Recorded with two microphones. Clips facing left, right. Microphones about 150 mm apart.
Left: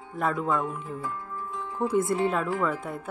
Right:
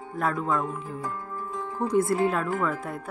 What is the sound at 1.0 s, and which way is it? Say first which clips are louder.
Music: right 1 dB; 45° right (ahead or behind).